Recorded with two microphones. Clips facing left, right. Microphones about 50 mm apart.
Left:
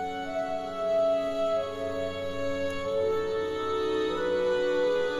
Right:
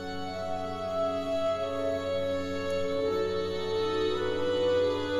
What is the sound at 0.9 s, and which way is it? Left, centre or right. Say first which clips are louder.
Music: left 5 dB; centre.